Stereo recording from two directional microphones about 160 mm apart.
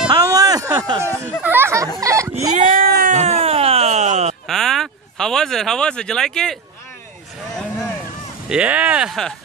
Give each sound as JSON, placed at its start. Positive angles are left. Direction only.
{"t": 0.1, "sound": "music", "side_deg": -20}
{"t": 1.4, "sound": "a sound", "side_deg": -15}
{"t": 2.5, "sound": "sheep", "side_deg": -55}
{"t": 3.2, "sound": "wail", "side_deg": -40}
{"t": 4.5, "sound": "speech", "side_deg": 0}
{"t": 8.5, "sound": "speech", "side_deg": -10}